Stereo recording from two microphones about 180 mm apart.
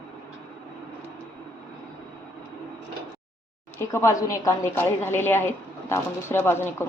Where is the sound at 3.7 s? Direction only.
15° left (ahead or behind).